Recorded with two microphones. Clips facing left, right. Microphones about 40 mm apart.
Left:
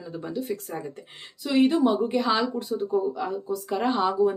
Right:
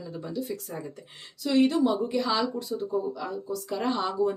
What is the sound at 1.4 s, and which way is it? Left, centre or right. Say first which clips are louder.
Speech: left 2 dB; centre.